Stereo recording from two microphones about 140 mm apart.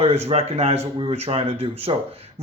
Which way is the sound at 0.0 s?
45° right (ahead or behind).